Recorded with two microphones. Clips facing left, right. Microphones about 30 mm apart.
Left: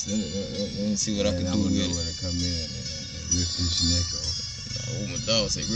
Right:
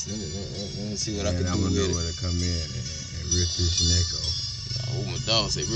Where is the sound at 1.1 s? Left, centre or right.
Left.